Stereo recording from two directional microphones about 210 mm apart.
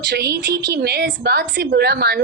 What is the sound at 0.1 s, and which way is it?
A woman's voice, 50° right (ahead or behind).